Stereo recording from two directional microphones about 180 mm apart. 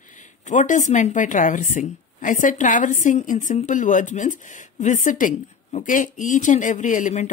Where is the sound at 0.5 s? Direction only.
45° left (ahead or behind).